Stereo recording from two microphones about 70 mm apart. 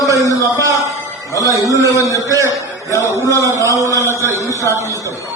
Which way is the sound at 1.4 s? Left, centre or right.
Right.